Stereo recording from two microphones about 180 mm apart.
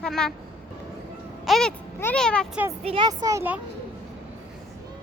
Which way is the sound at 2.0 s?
5° left (ahead or behind).